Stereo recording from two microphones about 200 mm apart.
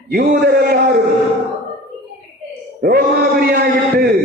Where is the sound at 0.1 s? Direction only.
50° right (ahead or behind).